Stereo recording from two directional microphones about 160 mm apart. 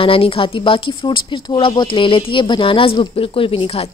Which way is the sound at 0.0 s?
35° left (ahead or behind).